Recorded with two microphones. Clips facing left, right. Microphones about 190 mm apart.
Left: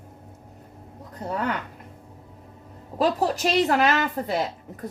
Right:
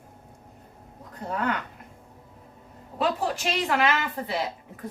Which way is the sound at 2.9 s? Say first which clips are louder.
Left 4 dB; 40° left (ahead or behind).